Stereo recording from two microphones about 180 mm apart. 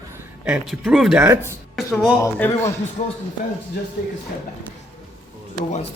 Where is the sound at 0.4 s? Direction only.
5° right (ahead or behind).